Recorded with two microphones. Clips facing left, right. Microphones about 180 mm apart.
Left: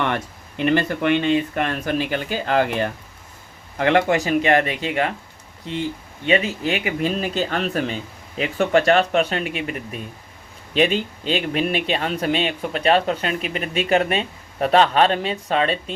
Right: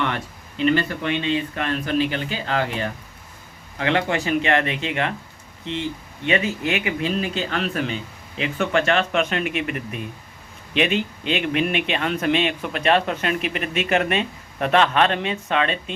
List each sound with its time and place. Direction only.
0.1 s speech: 55° left (ahead or behind)
6.2 s speech: 35° left (ahead or behind)